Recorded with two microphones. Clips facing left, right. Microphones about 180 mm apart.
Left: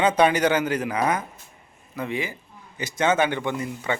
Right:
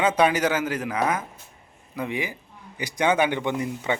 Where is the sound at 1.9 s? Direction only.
15° right (ahead or behind).